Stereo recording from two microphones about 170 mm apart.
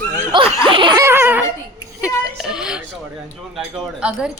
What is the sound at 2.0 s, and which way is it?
Speech, 5° right (ahead or behind).